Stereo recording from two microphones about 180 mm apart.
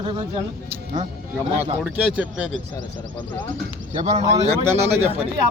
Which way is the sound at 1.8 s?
5° right (ahead or behind).